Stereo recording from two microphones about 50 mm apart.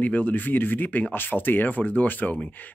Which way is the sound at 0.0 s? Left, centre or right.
Left.